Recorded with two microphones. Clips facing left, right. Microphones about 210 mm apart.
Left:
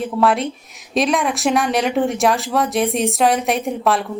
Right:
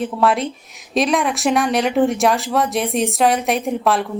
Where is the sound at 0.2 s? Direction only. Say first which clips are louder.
Left 2 dB; centre (ahead or behind).